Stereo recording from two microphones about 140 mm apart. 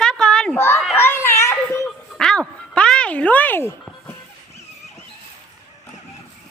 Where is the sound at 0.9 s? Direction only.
15° left (ahead or behind).